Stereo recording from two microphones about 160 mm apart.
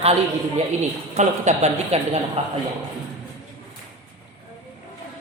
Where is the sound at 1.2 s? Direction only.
45° right (ahead or behind).